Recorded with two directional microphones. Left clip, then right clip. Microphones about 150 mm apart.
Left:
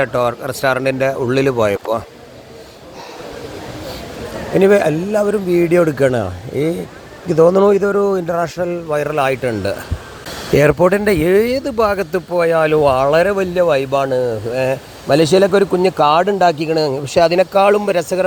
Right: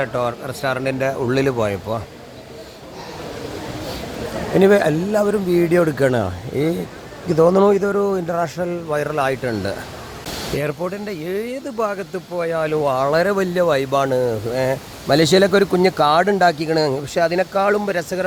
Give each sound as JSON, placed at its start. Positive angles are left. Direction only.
{"t": 0.0, "sound": "speech", "side_deg": 35}
{"t": 0.9, "sound": "speech", "side_deg": 20}
{"t": 1.5, "sound": "speech", "side_deg": 35}
{"t": 4.5, "sound": "a man's voice", "side_deg": 10}
{"t": 10.5, "sound": "speech", "side_deg": 40}
{"t": 11.6, "sound": "speech", "side_deg": 30}
{"t": 13.0, "sound": "speech", "side_deg": 15}
{"t": 13.3, "sound": "speech", "side_deg": 0}
{"t": 17.2, "sound": "a man's voice", "side_deg": 20}